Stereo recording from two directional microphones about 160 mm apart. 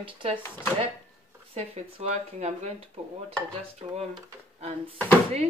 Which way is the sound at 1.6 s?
40° right (ahead or behind).